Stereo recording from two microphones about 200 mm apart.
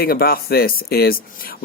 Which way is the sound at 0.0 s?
50° left (ahead or behind).